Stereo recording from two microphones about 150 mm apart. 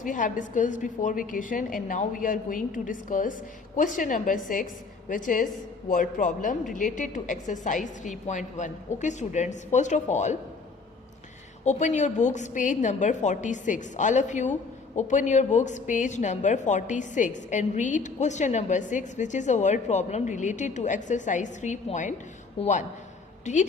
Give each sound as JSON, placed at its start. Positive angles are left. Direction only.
{"t": 0.0, "sound": "a woman's voice", "side_deg": 60}
{"t": 11.6, "sound": "a woman's voice", "side_deg": 50}
{"t": 23.5, "sound": "a woman's voice", "side_deg": 50}